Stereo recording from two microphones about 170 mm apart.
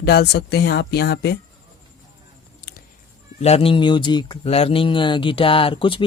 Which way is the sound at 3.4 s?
35° left (ahead or behind).